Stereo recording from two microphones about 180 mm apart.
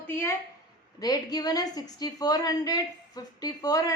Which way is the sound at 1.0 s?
20° left (ahead or behind).